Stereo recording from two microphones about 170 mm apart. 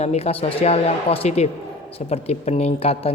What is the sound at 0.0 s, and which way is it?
A woman's voice, 35° left (ahead or behind).